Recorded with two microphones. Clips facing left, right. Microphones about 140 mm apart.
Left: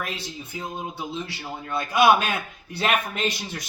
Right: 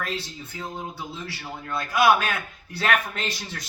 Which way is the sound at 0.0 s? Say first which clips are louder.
Right 1 dB; 15° left (ahead or behind).